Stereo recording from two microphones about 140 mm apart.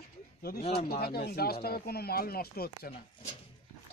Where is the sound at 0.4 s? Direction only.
90° left.